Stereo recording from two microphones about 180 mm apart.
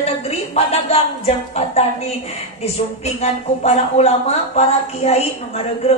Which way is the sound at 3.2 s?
35° left (ahead or behind).